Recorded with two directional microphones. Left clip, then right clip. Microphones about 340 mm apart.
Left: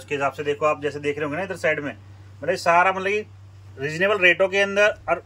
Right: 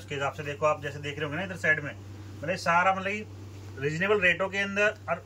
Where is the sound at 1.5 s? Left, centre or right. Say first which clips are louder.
Even; left.